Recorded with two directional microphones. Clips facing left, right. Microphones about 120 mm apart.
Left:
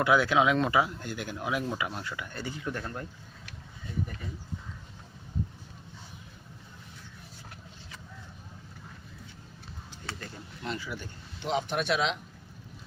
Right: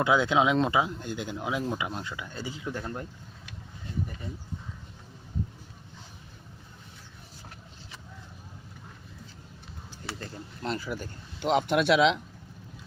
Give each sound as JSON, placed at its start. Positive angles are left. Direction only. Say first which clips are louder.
{"t": 0.0, "sound": "speech", "louder": "even", "side_deg": -20}
{"t": 10.2, "sound": "a sound", "louder": "right 3 dB", "side_deg": -35}
{"t": 11.4, "sound": "speech", "louder": "right 6 dB", "side_deg": -70}